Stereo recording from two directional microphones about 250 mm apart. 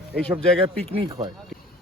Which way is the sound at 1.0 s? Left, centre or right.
Centre.